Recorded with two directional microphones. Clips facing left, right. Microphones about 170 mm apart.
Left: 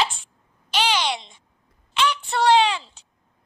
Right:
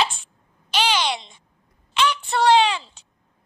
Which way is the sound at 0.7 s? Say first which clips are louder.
Right 1 dB; 90° right.